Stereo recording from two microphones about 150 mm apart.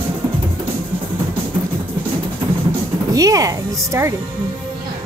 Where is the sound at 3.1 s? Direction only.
25° right (ahead or behind).